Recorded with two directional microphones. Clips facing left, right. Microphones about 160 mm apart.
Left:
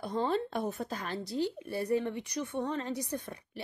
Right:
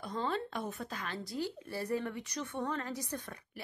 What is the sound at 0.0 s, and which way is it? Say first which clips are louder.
A woman's voice: left 5 dB; 30° left (ahead or behind).